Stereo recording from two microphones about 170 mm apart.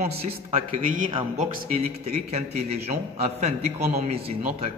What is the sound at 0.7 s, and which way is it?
A man's voice, 50° right (ahead or behind).